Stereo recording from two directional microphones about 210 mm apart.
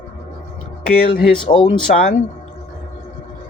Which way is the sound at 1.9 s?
45° left (ahead or behind).